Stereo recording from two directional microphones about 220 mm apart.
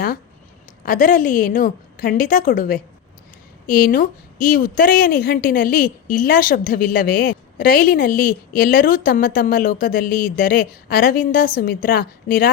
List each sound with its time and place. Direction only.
0.9 s a woman's voice: 40° left (ahead or behind)